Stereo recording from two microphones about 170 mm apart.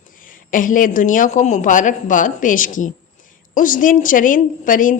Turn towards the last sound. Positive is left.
turn(degrees=50)  # may be behind; listen again after turning